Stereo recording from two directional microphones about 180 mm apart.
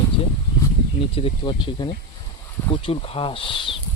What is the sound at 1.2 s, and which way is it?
Speech, 30° left (ahead or behind).